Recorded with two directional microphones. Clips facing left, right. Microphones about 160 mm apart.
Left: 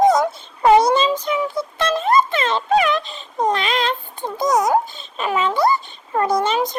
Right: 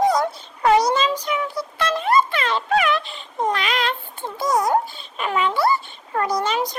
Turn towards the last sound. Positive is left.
turn(degrees=25)  # may be behind; listen again after turning